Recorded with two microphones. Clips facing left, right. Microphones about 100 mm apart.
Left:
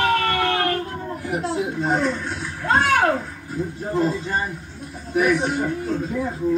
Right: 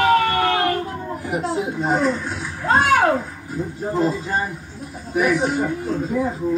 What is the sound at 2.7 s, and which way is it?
Speech, 20° right (ahead or behind).